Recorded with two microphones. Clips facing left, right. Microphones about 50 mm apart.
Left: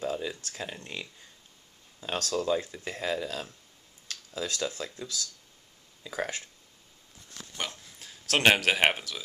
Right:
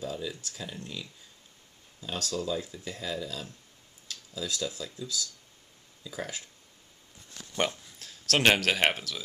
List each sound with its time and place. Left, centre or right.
0.0 s a sound: left
0.4 s speech: left
0.7 s speech: left
2.0 s speech: left
6.0 s speech: left
8.0 s speech: centre